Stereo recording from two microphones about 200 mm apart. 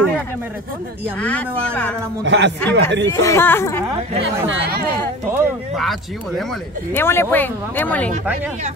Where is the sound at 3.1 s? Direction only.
15° left (ahead or behind).